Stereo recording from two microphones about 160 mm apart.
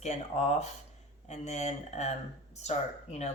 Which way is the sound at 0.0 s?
45° left (ahead or behind).